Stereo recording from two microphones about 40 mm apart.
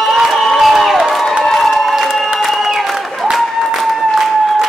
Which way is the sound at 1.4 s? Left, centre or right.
Centre.